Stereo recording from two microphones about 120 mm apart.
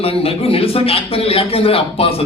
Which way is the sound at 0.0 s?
55° left (ahead or behind).